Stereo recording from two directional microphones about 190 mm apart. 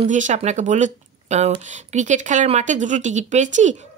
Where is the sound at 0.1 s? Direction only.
40° right (ahead or behind).